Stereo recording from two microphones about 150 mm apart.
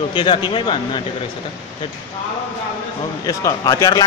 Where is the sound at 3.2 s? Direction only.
20° left (ahead or behind).